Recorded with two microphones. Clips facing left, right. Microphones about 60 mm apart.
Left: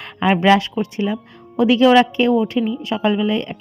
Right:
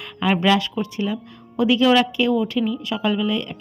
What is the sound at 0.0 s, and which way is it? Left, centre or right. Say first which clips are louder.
A woman's voice: left 4 dB; left.